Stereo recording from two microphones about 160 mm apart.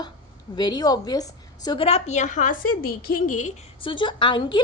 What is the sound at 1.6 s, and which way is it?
A woman's voice, 35° left (ahead or behind).